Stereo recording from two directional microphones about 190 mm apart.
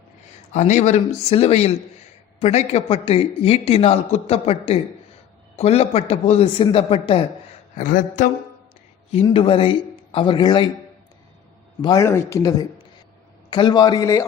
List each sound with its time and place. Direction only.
0.5 s a man's voice: 40° left (ahead or behind)
7.8 s speech: 45° left (ahead or behind)
9.2 s a man's voice: 30° left (ahead or behind)
11.8 s a man's voice: 20° left (ahead or behind)